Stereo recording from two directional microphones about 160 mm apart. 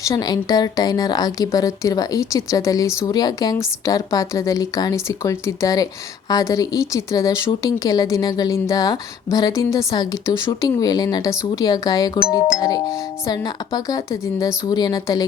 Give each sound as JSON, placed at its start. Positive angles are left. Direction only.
{"t": 0.0, "sound": "a woman's voice", "side_deg": 20}
{"t": 13.2, "sound": "a woman's voice", "side_deg": 25}